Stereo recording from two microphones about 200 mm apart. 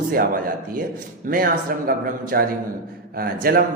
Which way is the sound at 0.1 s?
45° right (ahead or behind).